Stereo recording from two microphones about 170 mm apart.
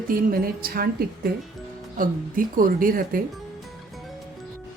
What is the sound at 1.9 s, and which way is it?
Speech, 55° right (ahead or behind).